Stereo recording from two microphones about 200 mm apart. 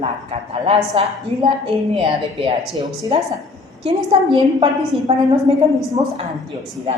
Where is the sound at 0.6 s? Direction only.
30° right (ahead or behind).